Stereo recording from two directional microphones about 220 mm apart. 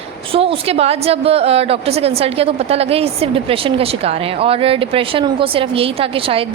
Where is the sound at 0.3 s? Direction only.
25° right (ahead or behind).